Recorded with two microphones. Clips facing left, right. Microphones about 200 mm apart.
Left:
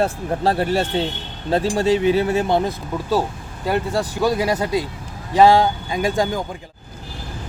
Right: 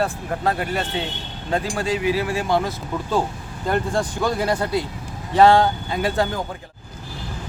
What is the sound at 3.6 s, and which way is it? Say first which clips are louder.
Speech: left 1 dB; 10° left (ahead or behind).